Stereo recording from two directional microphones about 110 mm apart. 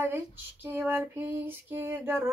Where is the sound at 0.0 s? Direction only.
20° right (ahead or behind).